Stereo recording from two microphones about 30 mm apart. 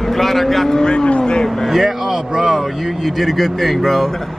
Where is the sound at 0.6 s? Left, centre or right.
Left.